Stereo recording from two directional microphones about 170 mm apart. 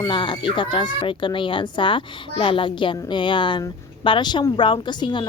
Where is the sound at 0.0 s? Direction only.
30° left (ahead or behind).